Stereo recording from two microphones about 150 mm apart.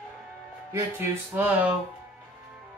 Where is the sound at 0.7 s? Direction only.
15° right (ahead or behind).